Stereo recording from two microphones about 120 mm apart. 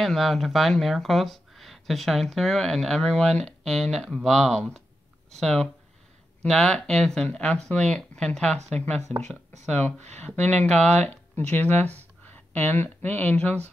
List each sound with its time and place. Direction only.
0.0 s speech: centre (ahead or behind)
9.1 s speech: 65° right (ahead or behind)
9.7 s speech: 15° left (ahead or behind)